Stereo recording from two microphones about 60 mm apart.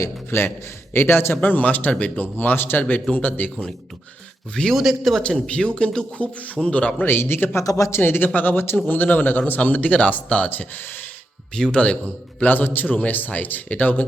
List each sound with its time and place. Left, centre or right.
0.3 s a man's voice: left
2.4 s a man's voice: left
4.7 s a man's voice: centre
5.5 s a man's voice: centre
7.1 s speech: left
7.6 s speech: left
7.9 s a man's voice: left
11.5 s speech: centre
12.4 s a man's voice: left